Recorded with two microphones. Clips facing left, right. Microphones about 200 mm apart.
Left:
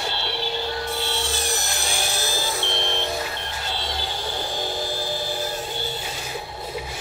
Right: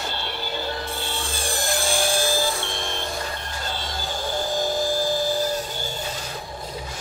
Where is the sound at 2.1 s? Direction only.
50° right (ahead or behind).